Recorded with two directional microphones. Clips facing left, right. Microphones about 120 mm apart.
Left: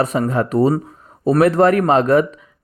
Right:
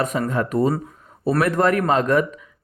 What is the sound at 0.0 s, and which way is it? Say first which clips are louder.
Speech: left 4 dB; 35° left (ahead or behind).